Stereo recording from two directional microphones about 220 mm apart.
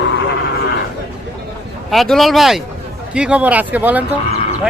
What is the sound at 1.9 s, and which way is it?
A man's voice, centre (ahead or behind).